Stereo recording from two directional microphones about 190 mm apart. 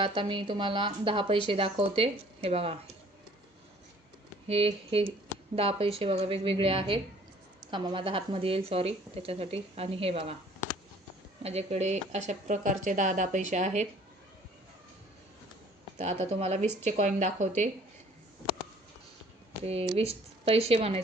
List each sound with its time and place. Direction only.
0.0 s a woman's voice: 25° right (ahead or behind)
4.4 s a woman's voice: 30° right (ahead or behind)
10.6 s a sound: 15° left (ahead or behind)
11.4 s speech: 35° right (ahead or behind)
16.0 s speech: 35° right (ahead or behind)
20.0 s speech: 30° right (ahead or behind)